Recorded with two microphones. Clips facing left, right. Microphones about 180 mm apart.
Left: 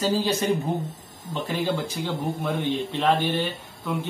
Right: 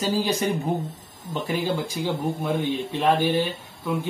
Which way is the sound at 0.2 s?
10° right (ahead or behind).